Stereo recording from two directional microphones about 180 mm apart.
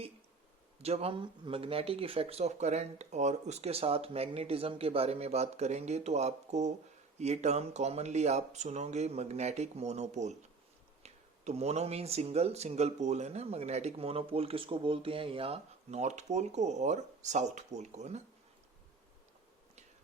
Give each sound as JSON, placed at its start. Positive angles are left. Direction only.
{"t": 0.8, "sound": "speech", "side_deg": -35}